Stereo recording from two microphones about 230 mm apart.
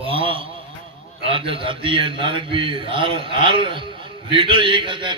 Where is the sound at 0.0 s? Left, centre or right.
Right.